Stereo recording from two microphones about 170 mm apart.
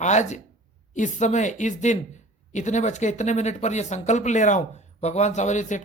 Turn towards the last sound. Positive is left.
turn(degrees=45)  # may be behind; listen again after turning